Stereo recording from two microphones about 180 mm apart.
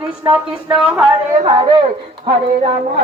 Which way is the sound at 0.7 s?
5° right (ahead or behind).